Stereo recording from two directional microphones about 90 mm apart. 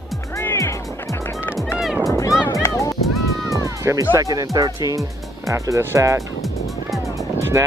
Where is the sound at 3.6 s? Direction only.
35° right (ahead or behind).